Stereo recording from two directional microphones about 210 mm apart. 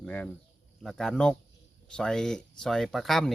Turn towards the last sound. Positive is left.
turn(degrees=0)  # may be behind; listen again after turning